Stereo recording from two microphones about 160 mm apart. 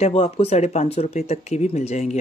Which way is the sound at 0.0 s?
40° left (ahead or behind).